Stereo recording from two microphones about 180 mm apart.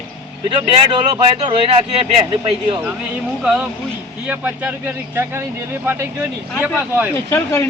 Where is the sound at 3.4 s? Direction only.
5° right (ahead or behind).